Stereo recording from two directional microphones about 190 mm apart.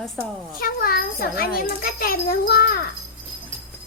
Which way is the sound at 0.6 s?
50° left (ahead or behind).